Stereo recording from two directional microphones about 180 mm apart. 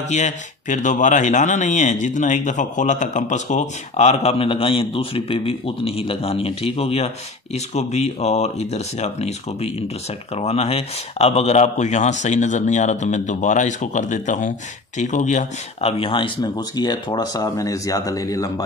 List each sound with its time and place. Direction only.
0.1 s speech: 40° left (ahead or behind); by 18.5 s 20° left (ahead or behind)